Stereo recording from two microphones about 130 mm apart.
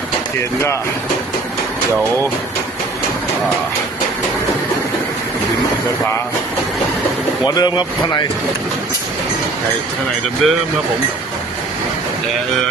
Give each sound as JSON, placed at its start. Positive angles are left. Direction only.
{"t": 7.4, "sound": "speech", "side_deg": 30}
{"t": 10.4, "sound": "speech", "side_deg": 0}